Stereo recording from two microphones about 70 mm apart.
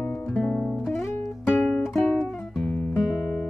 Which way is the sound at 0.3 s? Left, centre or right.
Centre.